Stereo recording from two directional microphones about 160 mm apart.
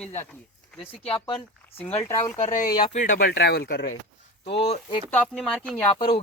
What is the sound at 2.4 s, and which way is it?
Speech, 55° left (ahead or behind).